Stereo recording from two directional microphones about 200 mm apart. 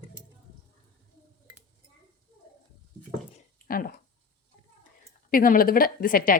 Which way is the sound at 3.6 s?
45° left (ahead or behind).